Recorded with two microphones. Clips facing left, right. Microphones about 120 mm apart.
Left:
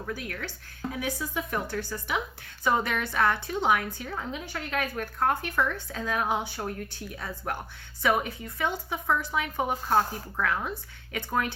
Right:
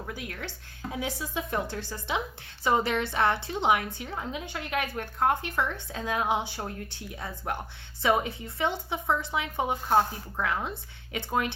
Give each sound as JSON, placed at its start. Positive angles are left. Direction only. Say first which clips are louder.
{"t": 0.1, "sound": "a woman's voice", "louder": "left 2 dB", "side_deg": -25}